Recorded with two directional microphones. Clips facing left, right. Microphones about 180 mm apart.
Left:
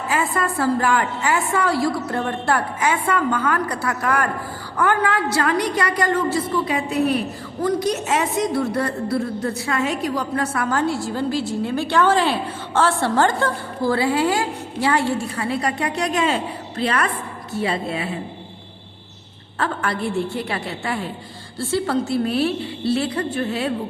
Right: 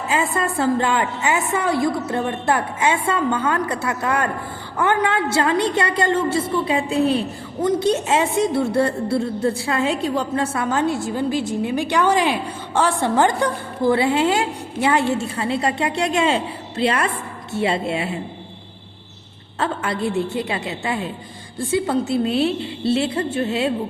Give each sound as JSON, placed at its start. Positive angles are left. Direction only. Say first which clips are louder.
{"t": 0.1, "sound": "a woman's voice", "louder": "right 1 dB", "side_deg": -25}
{"t": 19.5, "sound": "a woman's voice", "louder": "right 1 dB", "side_deg": -20}